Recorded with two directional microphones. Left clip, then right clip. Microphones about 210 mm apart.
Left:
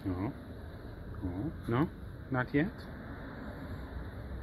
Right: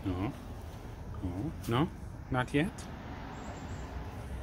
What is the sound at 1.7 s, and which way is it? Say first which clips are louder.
Speech: right 1 dB; 10° right (ahead or behind).